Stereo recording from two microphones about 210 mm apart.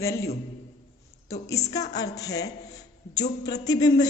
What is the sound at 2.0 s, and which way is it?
A man's voice, 15° left (ahead or behind).